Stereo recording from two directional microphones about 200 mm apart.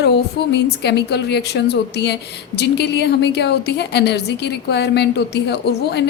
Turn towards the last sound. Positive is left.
turn(degrees=55)  # may be behind; listen again after turning